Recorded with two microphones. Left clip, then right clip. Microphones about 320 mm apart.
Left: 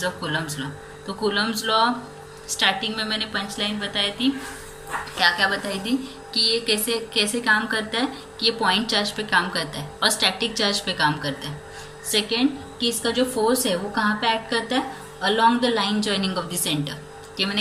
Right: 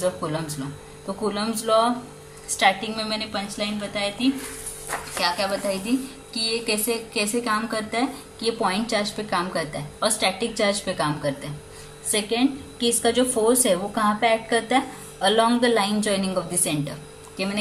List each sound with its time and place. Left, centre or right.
0.0 s a woman's voice: centre